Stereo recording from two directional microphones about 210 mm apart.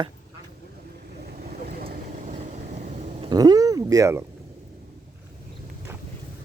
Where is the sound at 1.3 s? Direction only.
45° right (ahead or behind).